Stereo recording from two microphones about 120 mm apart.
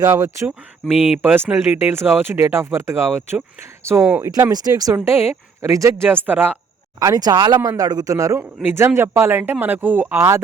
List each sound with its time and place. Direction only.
0.0 s speech: 25° right (ahead or behind)
1.2 s speech: 15° right (ahead or behind)
7.0 s speech: 30° right (ahead or behind)